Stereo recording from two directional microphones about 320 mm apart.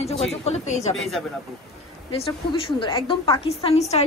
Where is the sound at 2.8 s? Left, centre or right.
Centre.